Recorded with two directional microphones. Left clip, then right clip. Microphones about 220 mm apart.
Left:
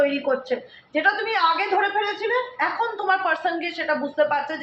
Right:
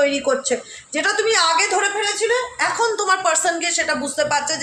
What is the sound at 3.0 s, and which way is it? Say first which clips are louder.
Speech: right 1 dB; 65° right (ahead or behind).